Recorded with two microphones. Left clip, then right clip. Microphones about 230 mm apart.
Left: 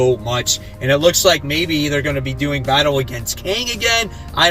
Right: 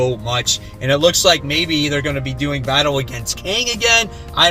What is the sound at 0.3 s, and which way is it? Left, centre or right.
Speech, centre.